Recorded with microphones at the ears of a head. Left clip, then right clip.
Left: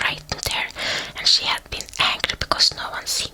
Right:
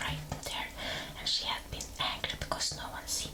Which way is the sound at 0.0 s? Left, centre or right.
Left.